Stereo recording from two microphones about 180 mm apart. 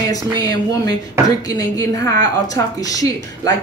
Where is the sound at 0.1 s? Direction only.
20° left (ahead or behind).